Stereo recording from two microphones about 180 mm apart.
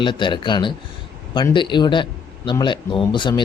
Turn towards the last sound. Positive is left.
turn(degrees=25)  # may be behind; listen again after turning